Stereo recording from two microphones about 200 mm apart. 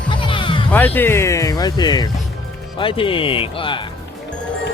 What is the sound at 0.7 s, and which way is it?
Speech, 10° left (ahead or behind).